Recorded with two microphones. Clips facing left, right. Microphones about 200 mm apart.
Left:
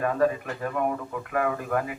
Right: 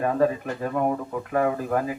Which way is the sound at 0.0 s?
30° right (ahead or behind).